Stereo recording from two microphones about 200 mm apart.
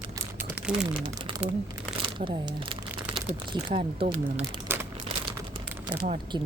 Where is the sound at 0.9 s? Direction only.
25° right (ahead or behind).